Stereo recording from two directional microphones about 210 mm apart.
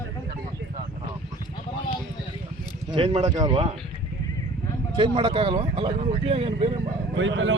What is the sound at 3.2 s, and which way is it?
Speech, 15° right (ahead or behind).